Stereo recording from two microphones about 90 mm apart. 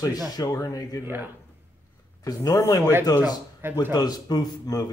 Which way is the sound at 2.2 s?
40° left (ahead or behind).